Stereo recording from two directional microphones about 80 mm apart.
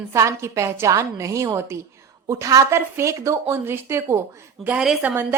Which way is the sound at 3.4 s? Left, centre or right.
Right.